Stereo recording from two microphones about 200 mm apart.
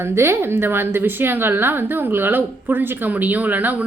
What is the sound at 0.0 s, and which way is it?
A woman's voice, 10° right (ahead or behind).